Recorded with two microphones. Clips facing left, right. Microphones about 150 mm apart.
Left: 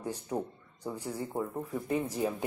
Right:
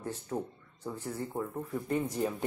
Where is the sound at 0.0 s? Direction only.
15° left (ahead or behind).